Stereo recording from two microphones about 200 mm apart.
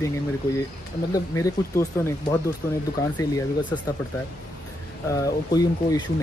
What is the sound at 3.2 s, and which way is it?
Speech, 15° left (ahead or behind).